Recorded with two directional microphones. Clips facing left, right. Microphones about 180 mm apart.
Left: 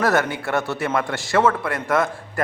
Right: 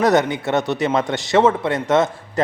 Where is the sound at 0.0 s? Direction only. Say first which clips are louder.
Right 4 dB; 20° right (ahead or behind).